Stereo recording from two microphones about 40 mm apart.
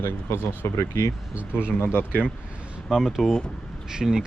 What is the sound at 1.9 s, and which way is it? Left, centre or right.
Speech, left.